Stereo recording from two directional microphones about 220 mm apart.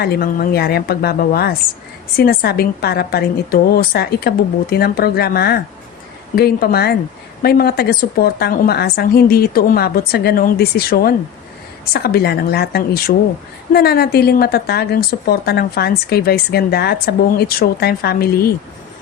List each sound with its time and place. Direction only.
0.0 s a woman's voice: 45° left (ahead or behind)